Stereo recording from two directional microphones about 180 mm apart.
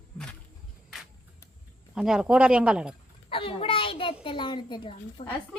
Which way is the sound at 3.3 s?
30° left (ahead or behind).